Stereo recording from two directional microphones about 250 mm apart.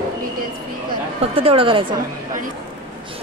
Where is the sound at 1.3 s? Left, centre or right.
Right.